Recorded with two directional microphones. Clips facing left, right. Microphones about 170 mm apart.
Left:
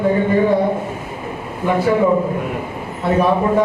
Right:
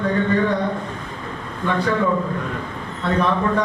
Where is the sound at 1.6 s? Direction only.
15° left (ahead or behind).